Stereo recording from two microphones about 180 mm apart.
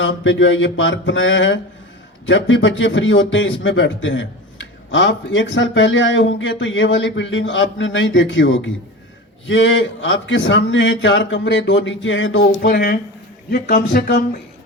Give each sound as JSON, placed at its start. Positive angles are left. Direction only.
{"t": 0.0, "sound": "a man's voice", "side_deg": 90}
{"t": 12.4, "sound": "speech", "side_deg": 55}